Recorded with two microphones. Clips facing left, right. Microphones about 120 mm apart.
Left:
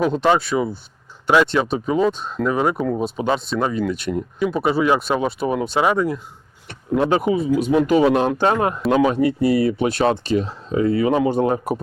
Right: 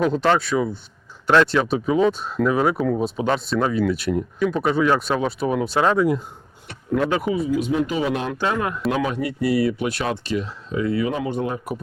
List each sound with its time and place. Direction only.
0.0 s speech: centre (ahead or behind)
6.9 s speech: 25° left (ahead or behind)
7.5 s speech: 45° left (ahead or behind)